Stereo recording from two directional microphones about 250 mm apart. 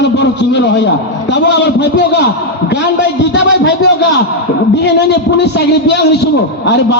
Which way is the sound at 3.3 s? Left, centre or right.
Left.